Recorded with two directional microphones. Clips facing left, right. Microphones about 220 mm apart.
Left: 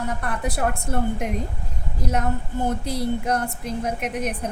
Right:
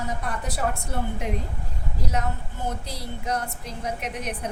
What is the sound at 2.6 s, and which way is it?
A woman's voice, 50° left (ahead or behind).